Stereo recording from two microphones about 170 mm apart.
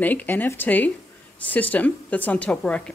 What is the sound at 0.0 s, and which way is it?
Speech, 10° left (ahead or behind).